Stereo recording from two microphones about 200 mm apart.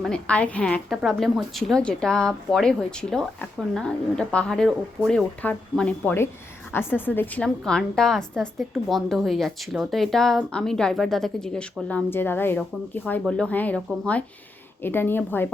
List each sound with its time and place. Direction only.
0.0 s a woman's voice: 5° left (ahead or behind)